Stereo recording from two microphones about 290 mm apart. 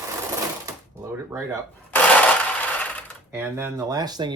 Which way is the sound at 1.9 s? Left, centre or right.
Centre.